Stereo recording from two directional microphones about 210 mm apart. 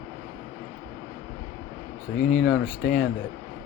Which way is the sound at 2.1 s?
45° left (ahead or behind).